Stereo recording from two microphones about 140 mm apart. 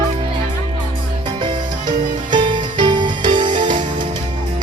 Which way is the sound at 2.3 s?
35° right (ahead or behind).